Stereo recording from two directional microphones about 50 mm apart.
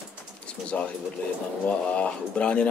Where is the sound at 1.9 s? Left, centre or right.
Left.